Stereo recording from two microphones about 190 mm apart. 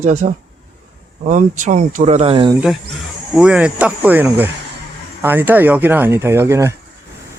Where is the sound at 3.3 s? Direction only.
5° right (ahead or behind).